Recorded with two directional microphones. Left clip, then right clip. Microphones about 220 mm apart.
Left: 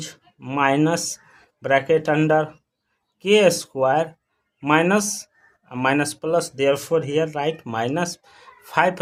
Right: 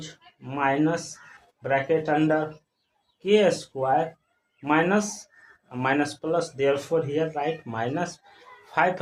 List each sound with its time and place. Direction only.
0.3 s speech: 40° left (ahead or behind)